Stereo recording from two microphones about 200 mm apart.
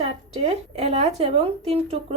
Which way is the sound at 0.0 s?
30° right (ahead or behind).